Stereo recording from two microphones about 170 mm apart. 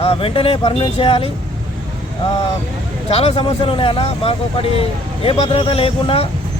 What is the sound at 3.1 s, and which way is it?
Speech, 35° left (ahead or behind).